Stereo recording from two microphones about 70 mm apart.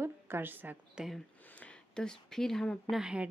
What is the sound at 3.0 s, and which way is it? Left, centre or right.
Speech, centre.